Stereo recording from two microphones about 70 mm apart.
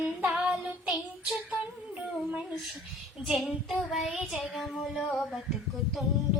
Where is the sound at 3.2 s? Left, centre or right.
Centre.